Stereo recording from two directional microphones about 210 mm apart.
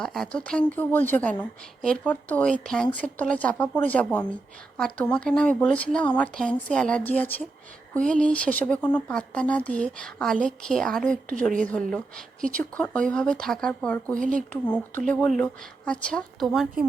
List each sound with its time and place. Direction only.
0.0 s a woman's voice: 5° left (ahead or behind)
14.2 s speech: 40° right (ahead or behind)
14.5 s speech: 5° left (ahead or behind)